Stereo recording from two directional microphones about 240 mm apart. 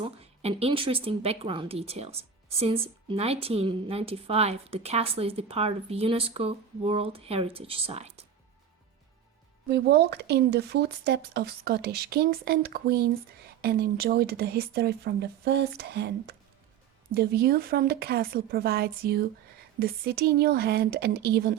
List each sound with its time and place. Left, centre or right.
0.0 s a woman's voice: right
9.6 s speech: right